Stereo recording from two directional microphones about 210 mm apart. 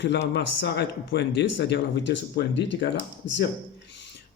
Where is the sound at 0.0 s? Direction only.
55° left (ahead or behind).